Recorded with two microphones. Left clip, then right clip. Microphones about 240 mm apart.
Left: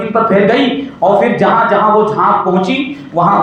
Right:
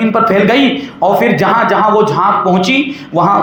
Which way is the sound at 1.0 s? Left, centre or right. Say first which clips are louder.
Left 1 dB; right.